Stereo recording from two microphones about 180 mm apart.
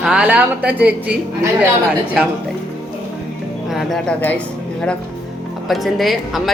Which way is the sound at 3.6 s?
Centre (ahead or behind).